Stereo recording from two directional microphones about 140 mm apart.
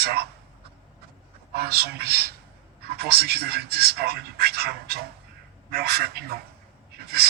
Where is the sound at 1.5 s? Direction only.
90° right.